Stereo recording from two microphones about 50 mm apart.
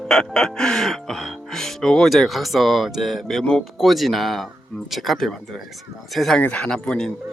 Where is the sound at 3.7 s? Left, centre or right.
Centre.